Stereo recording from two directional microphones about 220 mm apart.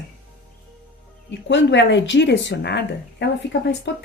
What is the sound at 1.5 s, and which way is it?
A woman's voice, 55° left (ahead or behind).